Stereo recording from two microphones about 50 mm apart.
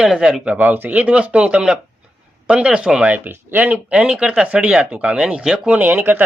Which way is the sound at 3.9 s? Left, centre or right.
Right.